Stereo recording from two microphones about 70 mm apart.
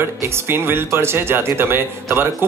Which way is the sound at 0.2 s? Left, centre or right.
Right.